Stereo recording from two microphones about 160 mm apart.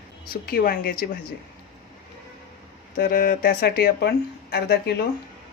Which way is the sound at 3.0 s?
60° left (ahead or behind).